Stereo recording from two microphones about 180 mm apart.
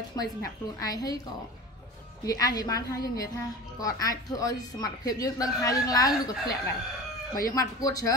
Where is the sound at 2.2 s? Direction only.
20° left (ahead or behind).